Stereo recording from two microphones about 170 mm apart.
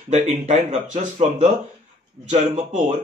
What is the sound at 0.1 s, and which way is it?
Speech, 40° right (ahead or behind).